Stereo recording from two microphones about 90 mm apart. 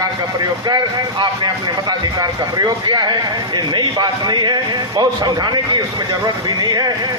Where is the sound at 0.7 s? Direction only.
55° right (ahead or behind).